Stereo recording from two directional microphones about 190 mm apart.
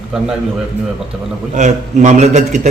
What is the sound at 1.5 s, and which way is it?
A man's voice, 40° right (ahead or behind).